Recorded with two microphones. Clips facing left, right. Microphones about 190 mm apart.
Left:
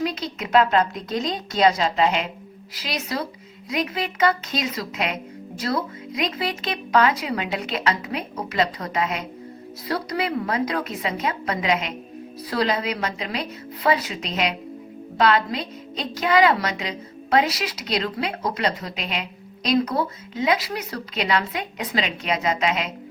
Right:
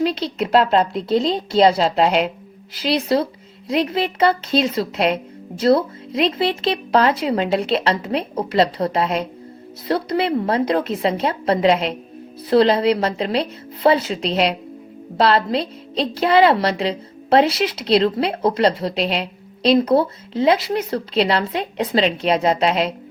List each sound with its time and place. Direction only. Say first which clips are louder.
0.0 s a woman's voice: right 6 dB; 30° right (ahead or behind)